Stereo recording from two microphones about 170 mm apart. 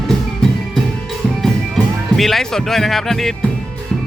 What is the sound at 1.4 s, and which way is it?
Music, centre (ahead or behind).